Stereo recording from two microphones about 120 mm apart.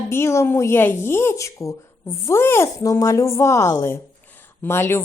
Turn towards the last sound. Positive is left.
turn(degrees=20)  # may be behind; listen again after turning